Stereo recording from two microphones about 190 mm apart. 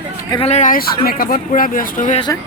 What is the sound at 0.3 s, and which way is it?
Speech, 30° left (ahead or behind).